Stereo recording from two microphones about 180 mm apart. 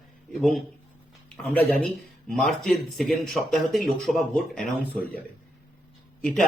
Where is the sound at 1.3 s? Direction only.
5° left (ahead or behind).